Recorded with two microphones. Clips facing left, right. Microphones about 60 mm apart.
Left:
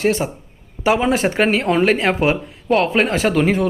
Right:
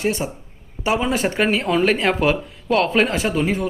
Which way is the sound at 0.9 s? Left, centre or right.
Left.